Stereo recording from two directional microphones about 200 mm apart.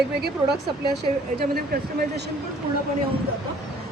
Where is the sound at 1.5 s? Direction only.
50° right (ahead or behind).